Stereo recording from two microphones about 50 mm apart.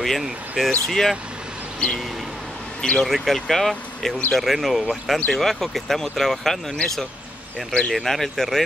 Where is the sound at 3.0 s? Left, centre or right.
Centre.